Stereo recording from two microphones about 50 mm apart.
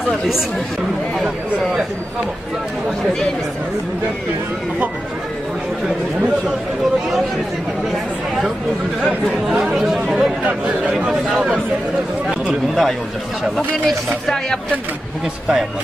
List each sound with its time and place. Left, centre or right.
10.0 s speech: centre
13.8 s speech: centre